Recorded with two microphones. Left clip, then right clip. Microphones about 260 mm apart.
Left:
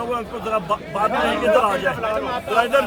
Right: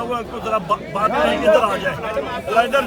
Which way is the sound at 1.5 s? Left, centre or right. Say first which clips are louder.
Right 3 dB; right.